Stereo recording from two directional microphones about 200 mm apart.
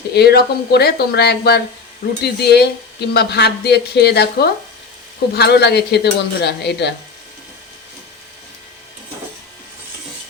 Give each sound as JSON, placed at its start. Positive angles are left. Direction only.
{"t": 0.1, "sound": "speech", "side_deg": 50}